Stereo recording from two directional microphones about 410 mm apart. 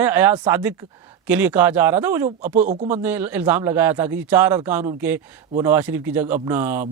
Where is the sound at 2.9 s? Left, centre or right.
Centre.